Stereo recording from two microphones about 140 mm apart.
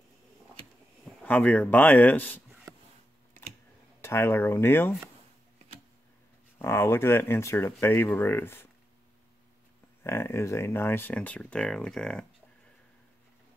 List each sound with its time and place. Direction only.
1.2 s speech: 10° left (ahead or behind)
4.0 s speech: 20° left (ahead or behind)
6.6 s speech: 20° left (ahead or behind)
10.0 s speech: 20° left (ahead or behind)